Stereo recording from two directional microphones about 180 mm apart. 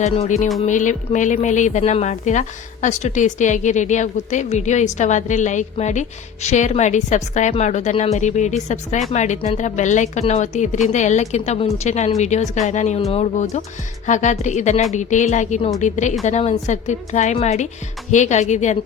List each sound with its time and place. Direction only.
0.0 s a woman's voice: 40° left (ahead or behind)